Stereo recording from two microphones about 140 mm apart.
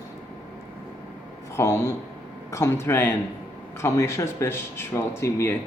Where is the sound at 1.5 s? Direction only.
20° left (ahead or behind).